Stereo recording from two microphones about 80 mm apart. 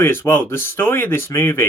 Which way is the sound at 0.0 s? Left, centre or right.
Left.